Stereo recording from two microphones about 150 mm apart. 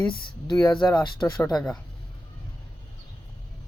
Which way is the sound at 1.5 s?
Centre (ahead or behind).